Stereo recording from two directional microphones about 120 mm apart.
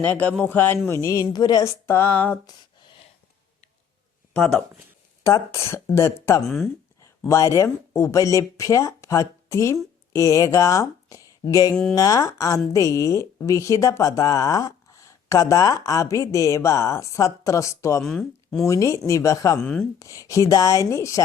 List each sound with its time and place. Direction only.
0.0 s a man's voice: 15° left (ahead or behind)
0.9 s speech: 30° left (ahead or behind)
1.9 s a man's voice: 15° left (ahead or behind)
2.5 s a sound: 40° left (ahead or behind)
5.2 s speech: 25° left (ahead or behind)
18.0 s speech: 5° left (ahead or behind)
18.6 s speech: 25° left (ahead or behind)
19.5 s a man's voice: 10° left (ahead or behind)
20.0 s speech: 25° left (ahead or behind)